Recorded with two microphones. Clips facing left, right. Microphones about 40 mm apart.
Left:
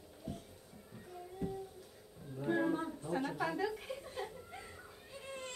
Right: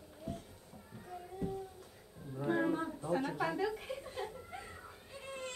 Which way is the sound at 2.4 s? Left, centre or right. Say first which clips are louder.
Right 1 dB; centre.